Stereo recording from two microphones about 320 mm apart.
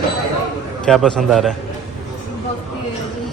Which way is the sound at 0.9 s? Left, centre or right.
Centre.